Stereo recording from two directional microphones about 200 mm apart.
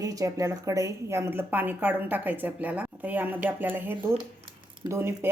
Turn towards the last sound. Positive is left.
turn(degrees=-10)  # may be behind; listen again after turning